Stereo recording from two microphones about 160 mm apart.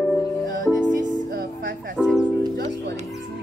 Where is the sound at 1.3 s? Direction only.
90° right.